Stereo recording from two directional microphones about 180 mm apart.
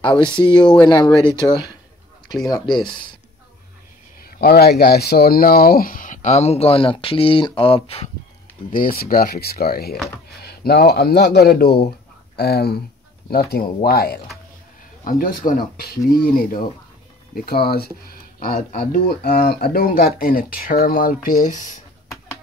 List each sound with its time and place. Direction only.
0.3 s speech: 25° left (ahead or behind)
4.2 s speech: 55° left (ahead or behind); by 8.1 s 30° left (ahead or behind)
8.6 s speech: 50° left (ahead or behind)